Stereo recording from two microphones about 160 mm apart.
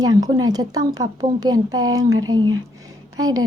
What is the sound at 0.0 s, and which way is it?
Speech, 25° right (ahead or behind).